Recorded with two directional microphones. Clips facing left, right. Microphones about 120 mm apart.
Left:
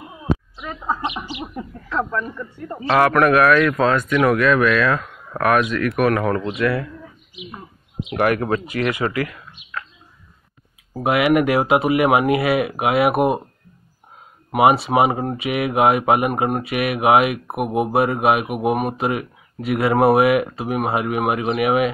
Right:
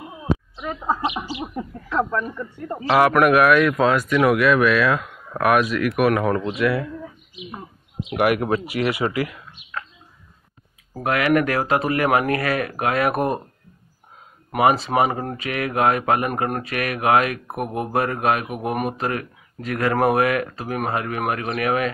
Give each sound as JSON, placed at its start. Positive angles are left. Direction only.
{"t": 0.6, "sound": "speech", "side_deg": -25}
{"t": 8.1, "sound": "speech", "side_deg": -10}
{"t": 11.0, "sound": "speech", "side_deg": 15}
{"t": 14.5, "sound": "speech", "side_deg": 5}